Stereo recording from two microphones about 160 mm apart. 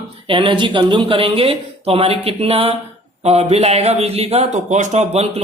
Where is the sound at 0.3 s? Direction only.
30° right (ahead or behind).